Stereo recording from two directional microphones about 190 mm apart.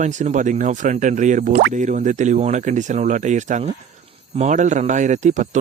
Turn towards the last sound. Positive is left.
turn(degrees=-40)  # may be behind; listen again after turning